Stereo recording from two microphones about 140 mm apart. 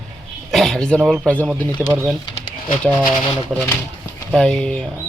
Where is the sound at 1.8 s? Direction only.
15° right (ahead or behind).